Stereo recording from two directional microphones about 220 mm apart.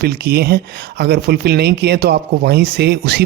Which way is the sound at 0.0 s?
45° right (ahead or behind).